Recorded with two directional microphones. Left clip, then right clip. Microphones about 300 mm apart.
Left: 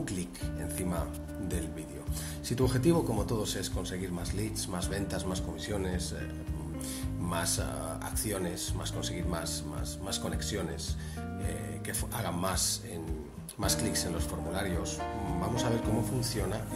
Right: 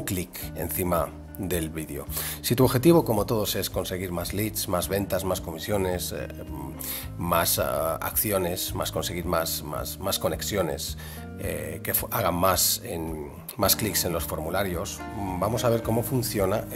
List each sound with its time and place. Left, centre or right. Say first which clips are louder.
2.4 s speech: right 8 dB; right
7.2 s speech: right 11 dB; right
11.9 s speech: right 11 dB; right